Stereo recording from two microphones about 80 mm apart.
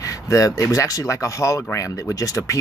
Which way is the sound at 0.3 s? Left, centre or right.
Left.